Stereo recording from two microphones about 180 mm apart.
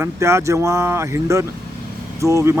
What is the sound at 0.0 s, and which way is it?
Speech, 15° right (ahead or behind).